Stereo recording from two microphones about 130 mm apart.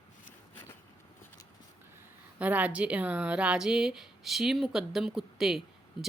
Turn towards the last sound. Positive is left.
turn(degrees=-5)  # may be behind; listen again after turning